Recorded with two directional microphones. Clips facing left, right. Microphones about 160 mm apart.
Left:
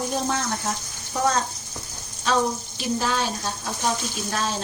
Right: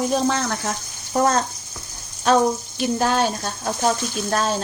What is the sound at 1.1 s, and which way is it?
Speech, 55° right (ahead or behind).